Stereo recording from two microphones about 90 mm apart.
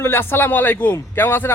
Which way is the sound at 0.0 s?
25° left (ahead or behind).